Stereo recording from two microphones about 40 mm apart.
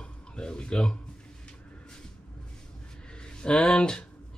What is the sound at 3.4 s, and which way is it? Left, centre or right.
Speech, left.